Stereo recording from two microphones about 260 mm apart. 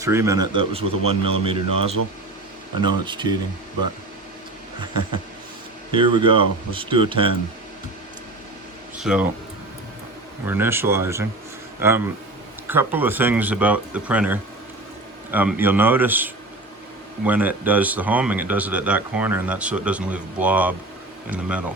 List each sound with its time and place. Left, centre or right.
0.0 s speech: centre
3.1 s speech: centre
5.9 s speech: centre
9.0 s speech: centre
10.4 s speech: centre